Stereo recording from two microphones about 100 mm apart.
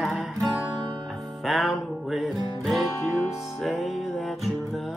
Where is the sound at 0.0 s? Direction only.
Centre (ahead or behind).